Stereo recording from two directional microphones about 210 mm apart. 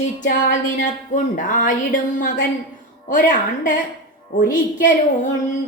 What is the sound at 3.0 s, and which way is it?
A woman's voice, 40° left (ahead or behind).